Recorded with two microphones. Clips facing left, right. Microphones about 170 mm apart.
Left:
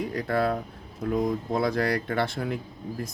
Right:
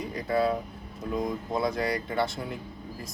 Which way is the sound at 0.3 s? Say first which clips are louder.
Right 1 dB; 65° left (ahead or behind).